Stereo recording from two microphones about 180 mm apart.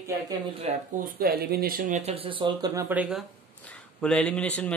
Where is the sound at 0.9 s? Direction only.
55° right (ahead or behind); by 3.2 s 5° right (ahead or behind).